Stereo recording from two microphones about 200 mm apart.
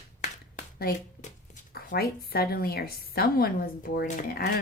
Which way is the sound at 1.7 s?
50° left (ahead or behind).